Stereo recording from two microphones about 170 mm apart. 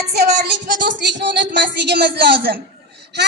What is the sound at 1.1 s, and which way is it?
A woman's voice, 90° right.